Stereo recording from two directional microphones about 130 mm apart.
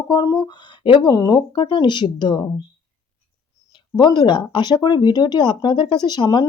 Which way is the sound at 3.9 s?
35° left (ahead or behind).